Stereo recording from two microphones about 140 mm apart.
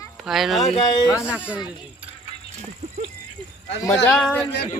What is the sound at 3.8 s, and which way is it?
Speech, 20° left (ahead or behind).